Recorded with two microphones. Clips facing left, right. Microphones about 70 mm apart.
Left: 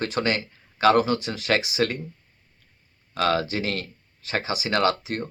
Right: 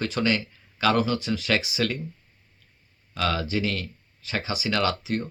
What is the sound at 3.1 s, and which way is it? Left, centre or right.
Speech, left.